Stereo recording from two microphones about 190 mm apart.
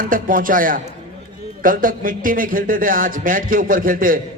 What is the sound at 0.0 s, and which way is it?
Speech, 45° right (ahead or behind).